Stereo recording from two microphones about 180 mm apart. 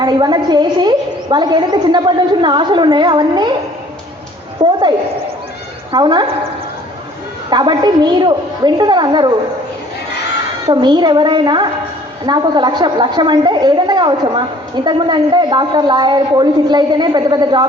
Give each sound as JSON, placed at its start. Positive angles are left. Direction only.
{"t": 0.0, "sound": "a woman's voice", "side_deg": -25}
{"t": 4.6, "sound": "a woman's voice", "side_deg": -25}
{"t": 5.9, "sound": "a woman's voice", "side_deg": -25}
{"t": 7.5, "sound": "a woman's voice", "side_deg": -25}
{"t": 10.7, "sound": "a woman's voice", "side_deg": -25}